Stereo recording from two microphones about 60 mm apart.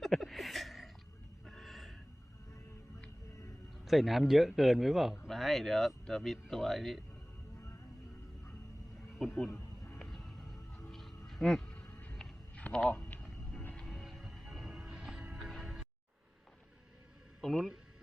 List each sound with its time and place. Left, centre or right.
0.0 s a sound: centre
1.5 s gasp: centre
3.8 s speech: centre
9.1 s speech: centre
10.1 s music: centre
11.7 s music: left
12.5 s a sound: centre
13.6 s music: left
13.8 s music: centre
17.4 s a sound: centre